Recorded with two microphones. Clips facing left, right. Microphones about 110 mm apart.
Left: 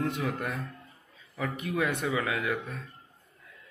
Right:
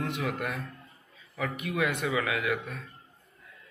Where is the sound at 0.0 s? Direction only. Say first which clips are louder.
Left 1 dB; 30° left (ahead or behind).